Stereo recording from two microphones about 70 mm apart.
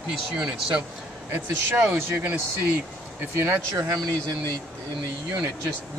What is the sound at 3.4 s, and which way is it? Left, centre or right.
Speech, right.